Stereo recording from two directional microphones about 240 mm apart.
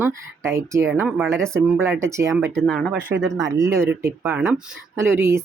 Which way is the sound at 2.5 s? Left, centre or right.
Centre.